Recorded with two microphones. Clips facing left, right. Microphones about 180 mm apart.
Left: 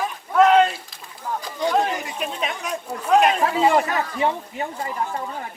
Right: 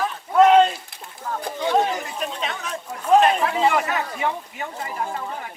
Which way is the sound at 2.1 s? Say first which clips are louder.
Left 1 dB; 10° left (ahead or behind).